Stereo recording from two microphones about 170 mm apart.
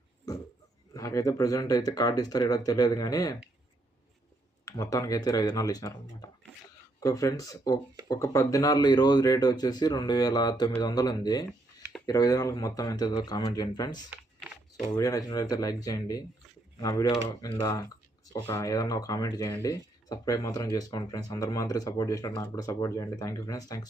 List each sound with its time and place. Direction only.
0.9 s speech: 20° left (ahead or behind)
4.6 s speech: 20° left (ahead or behind)